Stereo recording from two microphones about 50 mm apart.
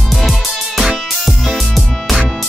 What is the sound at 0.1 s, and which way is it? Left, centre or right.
Music, centre.